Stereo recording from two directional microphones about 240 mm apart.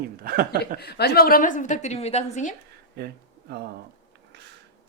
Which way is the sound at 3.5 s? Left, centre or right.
Right.